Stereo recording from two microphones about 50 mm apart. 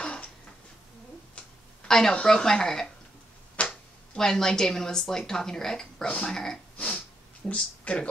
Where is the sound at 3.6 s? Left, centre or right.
Left.